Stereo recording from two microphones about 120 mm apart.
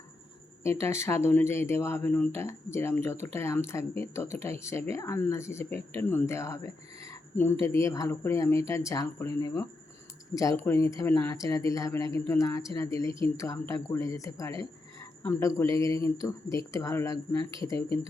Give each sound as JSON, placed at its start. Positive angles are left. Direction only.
{"t": 0.6, "sound": "speech", "side_deg": 20}